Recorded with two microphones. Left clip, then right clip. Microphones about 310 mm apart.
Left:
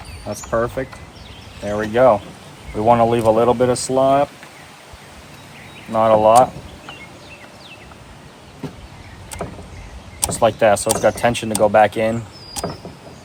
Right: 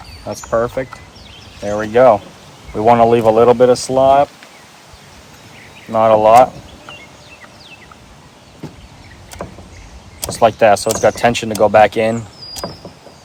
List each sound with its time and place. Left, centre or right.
0.3 s speech: right
5.9 s speech: right
10.2 s speech: right